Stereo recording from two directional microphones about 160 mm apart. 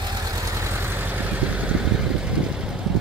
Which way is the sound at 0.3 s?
20° right (ahead or behind).